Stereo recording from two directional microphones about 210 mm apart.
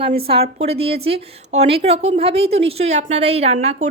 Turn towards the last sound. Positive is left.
turn(degrees=-30)  # may be behind; listen again after turning